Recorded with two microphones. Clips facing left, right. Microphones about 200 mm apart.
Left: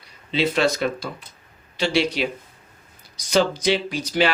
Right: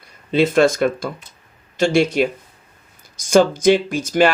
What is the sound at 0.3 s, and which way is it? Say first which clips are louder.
Speech: right 6 dB; 50° right (ahead or behind).